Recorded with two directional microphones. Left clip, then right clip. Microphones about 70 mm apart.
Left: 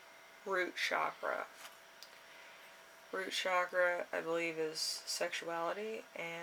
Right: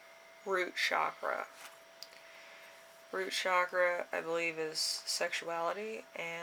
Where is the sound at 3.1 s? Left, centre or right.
Right.